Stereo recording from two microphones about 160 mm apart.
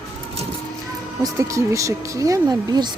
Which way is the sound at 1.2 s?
20° right (ahead or behind).